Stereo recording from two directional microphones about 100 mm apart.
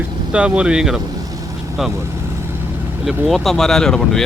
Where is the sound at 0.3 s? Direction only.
10° right (ahead or behind).